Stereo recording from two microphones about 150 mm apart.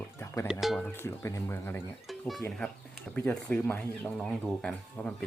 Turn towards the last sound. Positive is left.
turn(degrees=5)  # may be behind; listen again after turning